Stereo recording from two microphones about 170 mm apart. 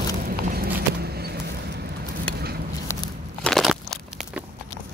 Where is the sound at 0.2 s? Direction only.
60° right (ahead or behind).